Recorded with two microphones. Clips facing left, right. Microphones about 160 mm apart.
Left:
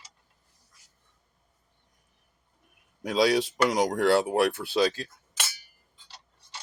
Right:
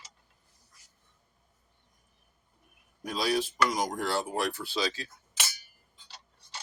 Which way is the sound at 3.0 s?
80° left.